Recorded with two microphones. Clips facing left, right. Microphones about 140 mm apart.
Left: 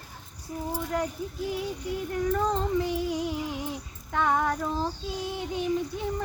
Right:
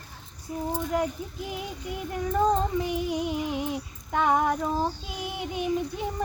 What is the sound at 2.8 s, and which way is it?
Female singing, 20° right (ahead or behind).